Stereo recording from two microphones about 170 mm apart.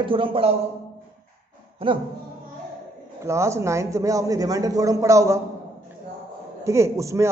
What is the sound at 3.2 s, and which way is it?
A man's voice, 15° right (ahead or behind).